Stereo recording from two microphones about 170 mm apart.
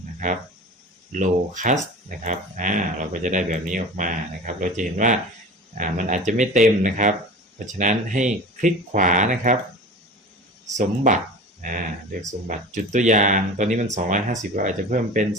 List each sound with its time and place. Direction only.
0.2 s speech: 45° right (ahead or behind)
10.7 s speech: 45° right (ahead or behind)